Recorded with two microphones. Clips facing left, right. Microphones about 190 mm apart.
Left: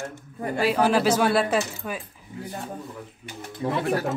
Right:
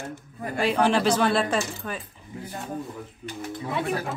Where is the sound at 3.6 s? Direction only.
45° left (ahead or behind).